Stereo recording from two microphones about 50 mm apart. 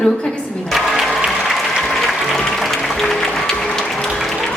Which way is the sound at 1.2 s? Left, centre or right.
Centre.